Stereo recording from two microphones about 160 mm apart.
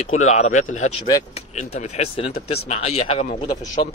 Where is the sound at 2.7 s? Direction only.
40° left (ahead or behind).